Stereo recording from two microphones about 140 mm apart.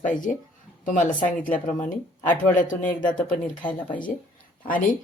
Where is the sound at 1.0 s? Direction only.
10° left (ahead or behind).